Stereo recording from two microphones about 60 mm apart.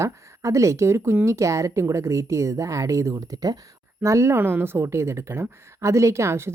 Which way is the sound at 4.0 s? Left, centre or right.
Right.